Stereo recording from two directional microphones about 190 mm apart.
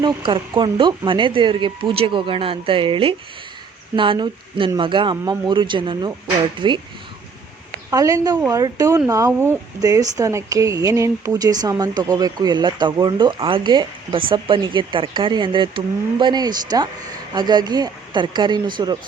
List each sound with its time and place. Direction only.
0.0 s speech: 25° right (ahead or behind)
7.9 s speech: 15° right (ahead or behind)